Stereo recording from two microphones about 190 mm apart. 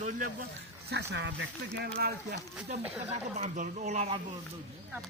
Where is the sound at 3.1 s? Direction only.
30° right (ahead or behind).